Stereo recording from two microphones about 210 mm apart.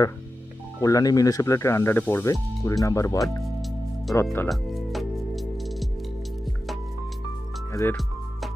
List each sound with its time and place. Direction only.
0.7 s speech: 15° left (ahead or behind)
4.5 s music: centre (ahead or behind)
7.7 s speech: 15° left (ahead or behind)